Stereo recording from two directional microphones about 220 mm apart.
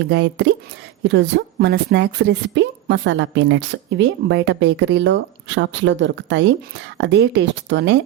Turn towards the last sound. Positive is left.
turn(degrees=-55)  # may be behind; listen again after turning